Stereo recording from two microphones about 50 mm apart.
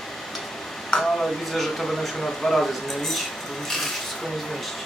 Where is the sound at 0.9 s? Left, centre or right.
Centre.